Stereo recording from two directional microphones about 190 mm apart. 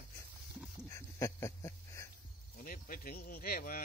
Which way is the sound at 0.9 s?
15° left (ahead or behind).